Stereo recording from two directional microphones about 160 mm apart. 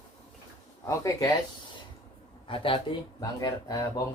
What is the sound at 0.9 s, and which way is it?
Speech, 20° left (ahead or behind).